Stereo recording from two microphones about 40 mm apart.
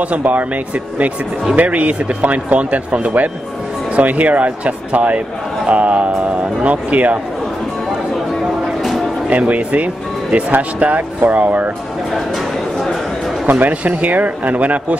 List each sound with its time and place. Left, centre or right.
0.2 s speech: right
1.6 s speech: right
9.4 s speech: right
13.5 s speech: right